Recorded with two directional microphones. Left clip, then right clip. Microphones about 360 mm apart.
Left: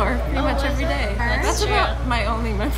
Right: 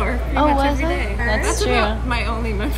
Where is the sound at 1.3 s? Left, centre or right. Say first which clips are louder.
Right 3 dB; centre.